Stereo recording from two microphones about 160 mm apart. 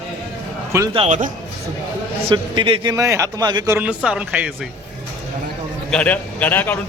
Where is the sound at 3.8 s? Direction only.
5° right (ahead or behind).